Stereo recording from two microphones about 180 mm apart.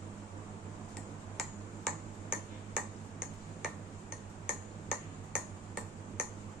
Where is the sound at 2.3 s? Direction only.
5° right (ahead or behind).